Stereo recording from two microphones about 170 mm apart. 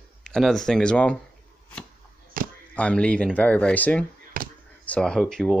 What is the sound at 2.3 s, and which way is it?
Chop, 55° right (ahead or behind).